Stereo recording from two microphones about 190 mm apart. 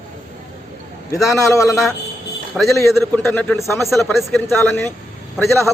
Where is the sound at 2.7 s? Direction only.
15° left (ahead or behind).